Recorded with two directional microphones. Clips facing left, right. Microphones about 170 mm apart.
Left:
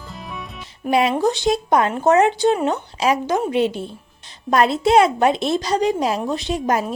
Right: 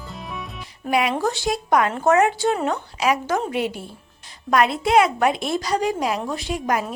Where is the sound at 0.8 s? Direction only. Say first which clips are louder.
Left 4 dB; 25° left (ahead or behind).